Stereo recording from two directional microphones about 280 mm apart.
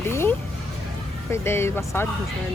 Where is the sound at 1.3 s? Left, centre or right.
Centre.